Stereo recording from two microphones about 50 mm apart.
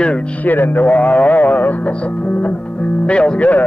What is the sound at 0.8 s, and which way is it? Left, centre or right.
A man's voice, left.